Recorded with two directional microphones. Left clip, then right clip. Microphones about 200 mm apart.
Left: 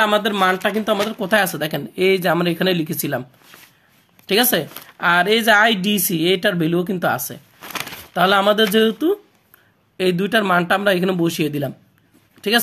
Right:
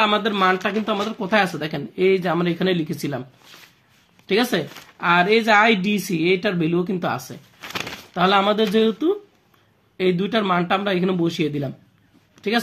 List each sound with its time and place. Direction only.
0.0 s speech: 30° left (ahead or behind)
4.3 s speech: 35° left (ahead or behind)